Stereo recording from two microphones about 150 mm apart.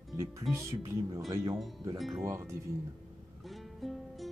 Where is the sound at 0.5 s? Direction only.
20° right (ahead or behind).